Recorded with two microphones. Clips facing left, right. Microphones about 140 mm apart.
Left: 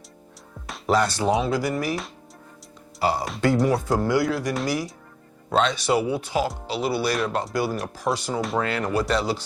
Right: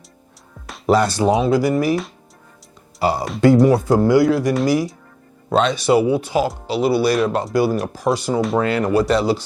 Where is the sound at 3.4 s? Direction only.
20° right (ahead or behind); by 8.5 s 5° right (ahead or behind).